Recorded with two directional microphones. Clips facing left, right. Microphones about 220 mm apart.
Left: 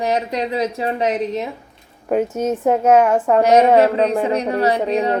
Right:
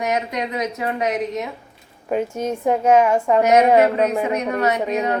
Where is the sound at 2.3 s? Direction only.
5° left (ahead or behind).